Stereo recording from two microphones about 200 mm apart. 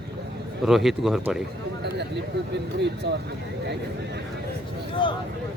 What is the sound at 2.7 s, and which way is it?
Speech, 60° right (ahead or behind).